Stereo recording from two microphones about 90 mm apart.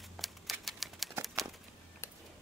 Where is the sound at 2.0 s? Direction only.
30° left (ahead or behind).